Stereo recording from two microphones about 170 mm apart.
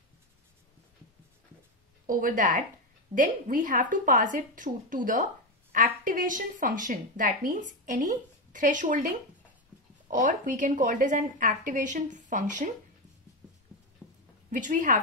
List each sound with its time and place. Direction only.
2.0 s a woman's voice: 55° right (ahead or behind)
14.0 s a sound: 5° right (ahead or behind)
14.5 s a woman's voice: 50° right (ahead or behind)